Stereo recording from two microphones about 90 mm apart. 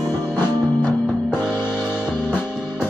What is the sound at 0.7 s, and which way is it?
Music, 25° left (ahead or behind).